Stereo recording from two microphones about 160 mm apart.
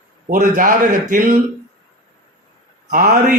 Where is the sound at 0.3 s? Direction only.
50° right (ahead or behind).